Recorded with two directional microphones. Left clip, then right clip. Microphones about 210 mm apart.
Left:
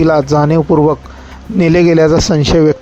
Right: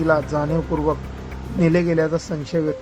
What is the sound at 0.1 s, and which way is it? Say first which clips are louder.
Speech: left 9 dB; 40° left (ahead or behind).